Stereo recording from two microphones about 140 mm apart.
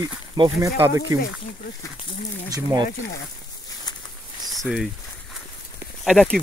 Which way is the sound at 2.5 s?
25° right (ahead or behind).